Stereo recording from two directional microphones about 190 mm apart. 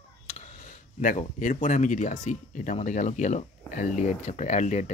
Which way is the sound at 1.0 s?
45° left (ahead or behind).